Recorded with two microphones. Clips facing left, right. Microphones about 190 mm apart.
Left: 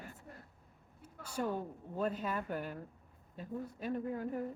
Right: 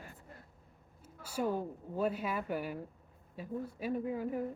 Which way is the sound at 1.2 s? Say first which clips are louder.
Right 3 dB; 5° right (ahead or behind).